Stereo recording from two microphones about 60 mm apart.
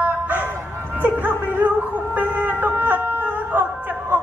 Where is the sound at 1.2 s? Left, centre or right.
Right.